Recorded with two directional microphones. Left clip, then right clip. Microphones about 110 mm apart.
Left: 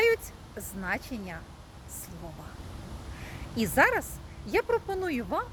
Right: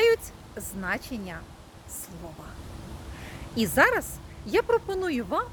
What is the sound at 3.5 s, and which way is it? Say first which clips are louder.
A woman's voice: right 2 dB; 20° right (ahead or behind).